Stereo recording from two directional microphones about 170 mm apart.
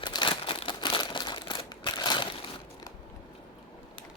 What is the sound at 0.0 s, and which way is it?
Crumpling, 25° left (ahead or behind).